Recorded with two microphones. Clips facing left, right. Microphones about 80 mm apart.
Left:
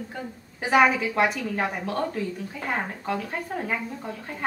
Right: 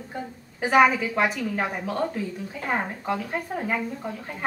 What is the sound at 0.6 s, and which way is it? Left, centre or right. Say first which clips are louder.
A woman's voice: right 1 dB; centre.